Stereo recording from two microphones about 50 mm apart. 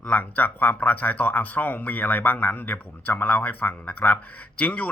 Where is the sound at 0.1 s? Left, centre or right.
Left.